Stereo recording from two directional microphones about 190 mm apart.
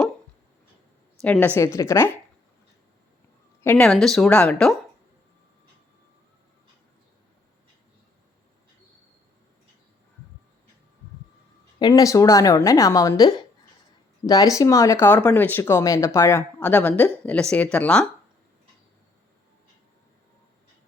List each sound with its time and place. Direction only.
1.2 s speech: 10° left (ahead or behind)
3.6 s speech: 10° left (ahead or behind)
3.8 s speech: centre (ahead or behind)
11.8 s speech: 20° left (ahead or behind); by 18.0 s 5° left (ahead or behind)